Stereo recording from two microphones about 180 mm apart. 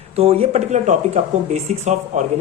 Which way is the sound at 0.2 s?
35° right (ahead or behind).